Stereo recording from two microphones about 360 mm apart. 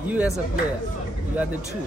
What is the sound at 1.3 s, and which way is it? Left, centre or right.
Speech, centre.